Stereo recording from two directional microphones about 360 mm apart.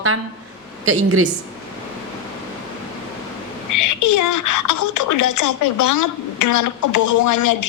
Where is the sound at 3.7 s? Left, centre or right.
Left.